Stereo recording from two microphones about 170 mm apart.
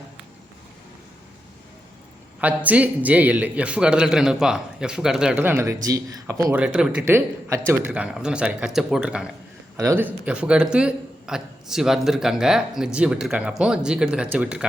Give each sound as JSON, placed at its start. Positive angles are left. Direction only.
{"t": 2.4, "sound": "a man's voice", "side_deg": -10}
{"t": 6.5, "sound": "a man's voice", "side_deg": -5}
{"t": 7.0, "sound": "a man's voice", "side_deg": -15}